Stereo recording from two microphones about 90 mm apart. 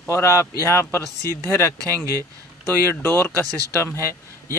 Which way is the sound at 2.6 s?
25° left (ahead or behind).